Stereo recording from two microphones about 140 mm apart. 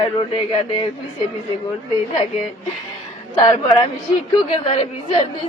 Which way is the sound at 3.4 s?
35° left (ahead or behind).